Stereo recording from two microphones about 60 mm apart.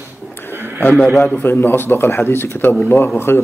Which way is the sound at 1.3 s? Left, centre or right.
Left.